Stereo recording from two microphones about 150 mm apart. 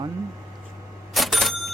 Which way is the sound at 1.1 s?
Centre (ahead or behind).